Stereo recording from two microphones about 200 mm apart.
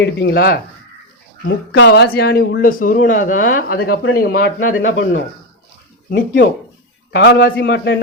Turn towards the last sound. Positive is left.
turn(degrees=60)  # may be behind; listen again after turning